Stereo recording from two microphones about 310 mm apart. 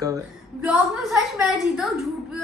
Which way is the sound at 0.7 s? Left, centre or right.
Centre.